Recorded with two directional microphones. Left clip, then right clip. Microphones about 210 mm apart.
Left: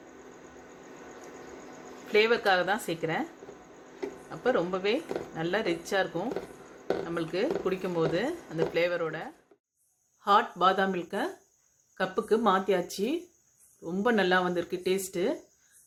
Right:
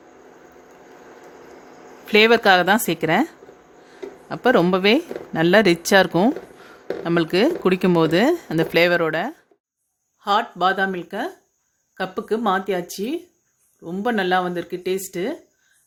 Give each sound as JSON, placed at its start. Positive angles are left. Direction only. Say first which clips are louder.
{"t": 2.0, "sound": "speech", "louder": "right 10 dB", "side_deg": -45}
{"t": 4.3, "sound": "speech", "louder": "right 11 dB", "side_deg": -50}
{"t": 10.2, "sound": "speech", "louder": "right 4 dB", "side_deg": -25}